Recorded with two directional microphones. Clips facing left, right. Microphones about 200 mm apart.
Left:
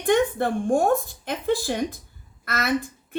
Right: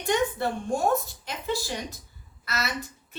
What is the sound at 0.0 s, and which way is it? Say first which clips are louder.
A woman's voice: left 5 dB; 50° left (ahead or behind).